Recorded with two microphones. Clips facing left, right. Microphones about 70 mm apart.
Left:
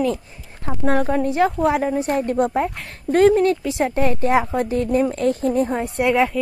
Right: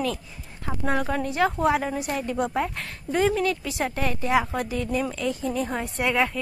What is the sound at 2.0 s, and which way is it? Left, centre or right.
Speech, left.